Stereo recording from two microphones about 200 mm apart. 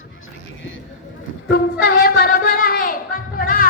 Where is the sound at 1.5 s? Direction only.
50° left (ahead or behind).